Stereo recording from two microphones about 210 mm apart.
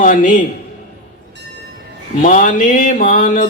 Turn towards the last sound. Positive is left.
turn(degrees=40)  # may be behind; listen again after turning